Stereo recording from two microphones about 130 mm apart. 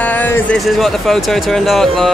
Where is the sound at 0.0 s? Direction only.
15° left (ahead or behind).